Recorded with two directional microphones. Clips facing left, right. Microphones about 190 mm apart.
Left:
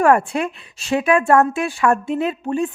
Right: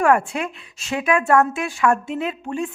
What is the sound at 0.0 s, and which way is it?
A woman's voice, 35° left (ahead or behind).